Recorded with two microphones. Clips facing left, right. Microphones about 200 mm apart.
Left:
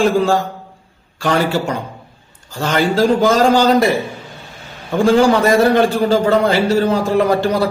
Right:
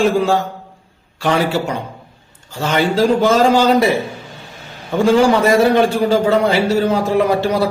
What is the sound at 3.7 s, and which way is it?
Speech, 5° right (ahead or behind).